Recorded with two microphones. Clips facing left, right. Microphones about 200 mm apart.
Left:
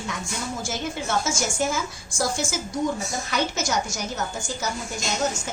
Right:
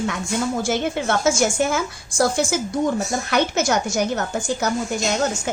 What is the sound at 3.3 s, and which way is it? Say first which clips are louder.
A woman's voice: right 6 dB; 60° right (ahead or behind).